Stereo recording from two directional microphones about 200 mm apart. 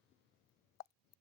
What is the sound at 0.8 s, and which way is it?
Plop, 50° left (ahead or behind).